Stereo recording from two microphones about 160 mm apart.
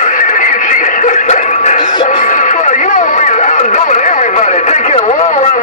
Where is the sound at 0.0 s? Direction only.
55° left (ahead or behind).